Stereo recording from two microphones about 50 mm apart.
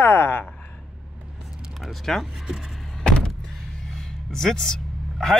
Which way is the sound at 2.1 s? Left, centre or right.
Centre.